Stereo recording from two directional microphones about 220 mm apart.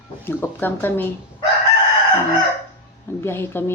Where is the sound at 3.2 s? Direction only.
10° left (ahead or behind).